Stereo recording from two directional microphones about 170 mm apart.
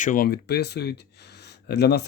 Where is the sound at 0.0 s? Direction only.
55° left (ahead or behind).